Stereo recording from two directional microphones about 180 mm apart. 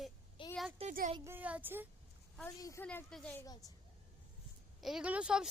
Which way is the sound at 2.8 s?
5° left (ahead or behind).